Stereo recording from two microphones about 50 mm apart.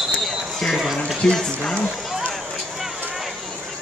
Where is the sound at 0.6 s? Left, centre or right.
Centre.